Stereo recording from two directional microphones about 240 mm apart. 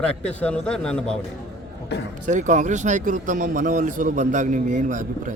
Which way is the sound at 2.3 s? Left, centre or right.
Right.